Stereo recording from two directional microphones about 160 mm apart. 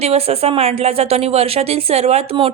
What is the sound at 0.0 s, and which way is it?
Speech, 40° right (ahead or behind).